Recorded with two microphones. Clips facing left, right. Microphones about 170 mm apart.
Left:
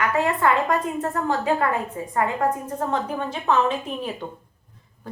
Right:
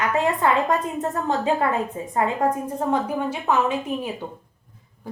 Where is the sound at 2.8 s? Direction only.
10° right (ahead or behind).